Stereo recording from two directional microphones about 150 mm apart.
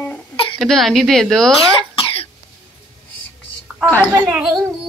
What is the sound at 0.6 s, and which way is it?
Speech, centre (ahead or behind).